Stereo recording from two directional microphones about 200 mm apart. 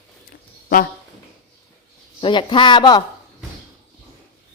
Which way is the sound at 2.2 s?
25° left (ahead or behind).